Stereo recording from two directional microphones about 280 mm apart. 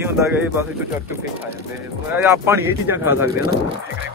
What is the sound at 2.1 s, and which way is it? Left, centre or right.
Speech, centre.